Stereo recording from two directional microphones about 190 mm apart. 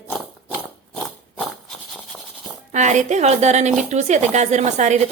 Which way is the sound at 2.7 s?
40° right (ahead or behind).